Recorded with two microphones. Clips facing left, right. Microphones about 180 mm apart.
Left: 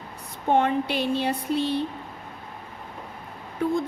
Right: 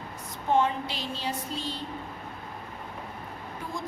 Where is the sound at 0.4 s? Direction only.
60° left (ahead or behind).